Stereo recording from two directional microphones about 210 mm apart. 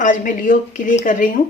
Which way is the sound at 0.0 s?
40° left (ahead or behind).